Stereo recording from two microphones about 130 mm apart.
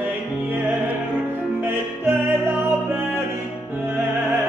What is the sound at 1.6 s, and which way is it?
Music, 15° right (ahead or behind).